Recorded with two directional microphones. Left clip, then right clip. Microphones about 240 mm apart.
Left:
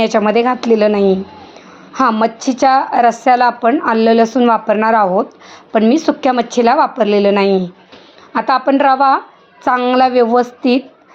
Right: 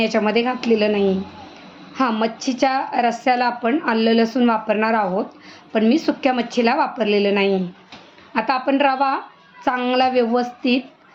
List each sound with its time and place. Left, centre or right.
0.0 s a woman's voice: left